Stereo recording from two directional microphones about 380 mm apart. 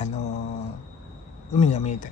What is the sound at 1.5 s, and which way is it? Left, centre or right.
Speech, centre.